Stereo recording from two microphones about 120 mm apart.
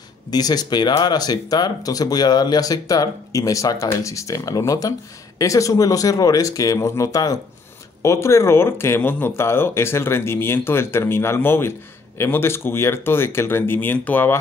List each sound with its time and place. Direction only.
0.3 s speech: 35° left (ahead or behind); by 14.4 s 15° left (ahead or behind)